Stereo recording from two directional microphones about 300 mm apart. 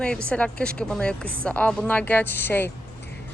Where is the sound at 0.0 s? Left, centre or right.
Centre.